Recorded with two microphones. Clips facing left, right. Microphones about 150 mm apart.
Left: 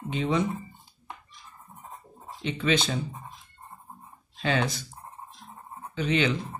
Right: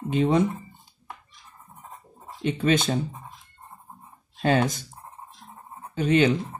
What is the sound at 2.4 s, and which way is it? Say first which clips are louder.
Speech: right 4 dB; 50° right (ahead or behind).